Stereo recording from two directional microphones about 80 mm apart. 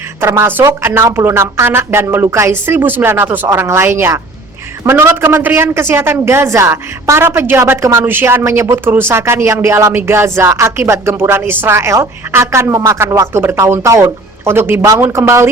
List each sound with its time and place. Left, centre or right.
0.2 s music: right
0.7 s speech: right
1.1 s music: right
2.2 s speech: right
4.9 s music: right
8.0 s music: right